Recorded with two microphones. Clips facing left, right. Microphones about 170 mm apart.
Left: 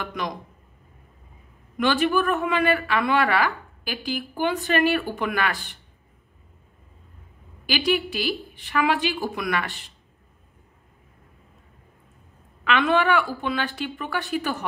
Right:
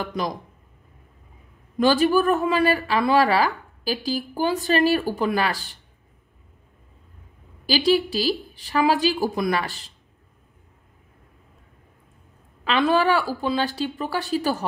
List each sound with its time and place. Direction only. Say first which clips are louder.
0.0 s a woman's voice: right 3 dB; 35° right (ahead or behind)
1.8 s a woman's voice: right 3 dB; 35° right (ahead or behind)
7.6 s a woman's voice: right 4 dB; 35° right (ahead or behind)
12.6 s a woman's voice: right 1 dB; 30° right (ahead or behind)